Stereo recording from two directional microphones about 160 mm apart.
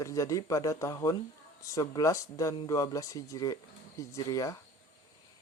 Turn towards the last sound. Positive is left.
turn(degrees=20)  # may be behind; listen again after turning